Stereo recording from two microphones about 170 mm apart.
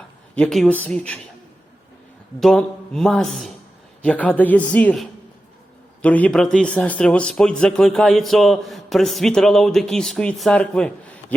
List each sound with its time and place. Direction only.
0.3 s a man's voice: 5° left (ahead or behind)
2.4 s a man's voice: 5° left (ahead or behind)